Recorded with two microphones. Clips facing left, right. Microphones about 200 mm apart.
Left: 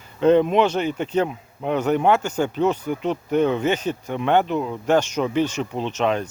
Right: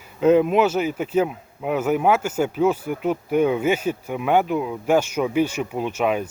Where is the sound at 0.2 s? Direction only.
5° right (ahead or behind).